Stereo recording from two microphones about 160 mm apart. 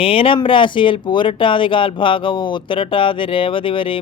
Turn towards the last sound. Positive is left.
turn(degrees=35)  # may be behind; listen again after turning